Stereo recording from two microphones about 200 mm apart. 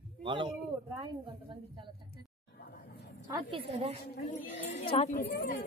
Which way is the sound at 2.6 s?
50° left (ahead or behind).